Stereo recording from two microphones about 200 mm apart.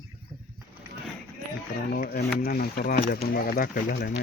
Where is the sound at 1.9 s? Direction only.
50° left (ahead or behind).